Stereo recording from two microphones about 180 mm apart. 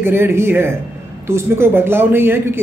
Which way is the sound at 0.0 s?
10° right (ahead or behind).